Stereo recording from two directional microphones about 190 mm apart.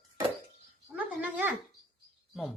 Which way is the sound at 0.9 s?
10° right (ahead or behind).